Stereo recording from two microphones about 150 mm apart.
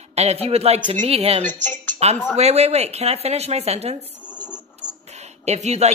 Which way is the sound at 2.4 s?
45° right (ahead or behind).